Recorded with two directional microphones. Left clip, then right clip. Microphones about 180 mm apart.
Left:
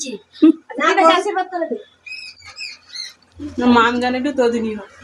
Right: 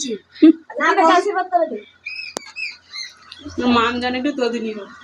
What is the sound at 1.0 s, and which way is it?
Speech, 15° left (ahead or behind).